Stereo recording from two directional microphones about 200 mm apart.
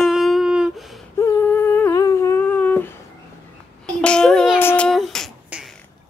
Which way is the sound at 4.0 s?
5° left (ahead or behind).